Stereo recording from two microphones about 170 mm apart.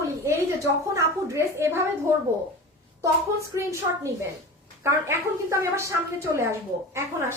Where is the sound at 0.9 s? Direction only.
15° right (ahead or behind).